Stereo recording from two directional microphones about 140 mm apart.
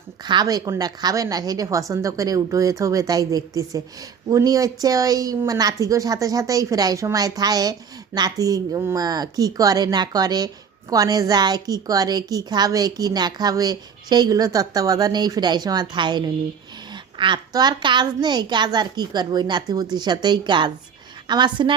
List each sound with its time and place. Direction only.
0.3 s a woman's voice: 30° right (ahead or behind)